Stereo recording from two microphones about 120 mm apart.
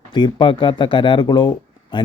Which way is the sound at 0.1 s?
40° left (ahead or behind).